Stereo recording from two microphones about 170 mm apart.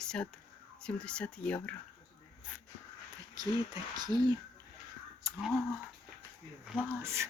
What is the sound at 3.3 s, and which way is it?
Speech, 25° right (ahead or behind).